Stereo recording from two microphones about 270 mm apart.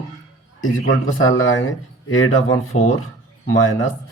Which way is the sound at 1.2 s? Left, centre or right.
Left.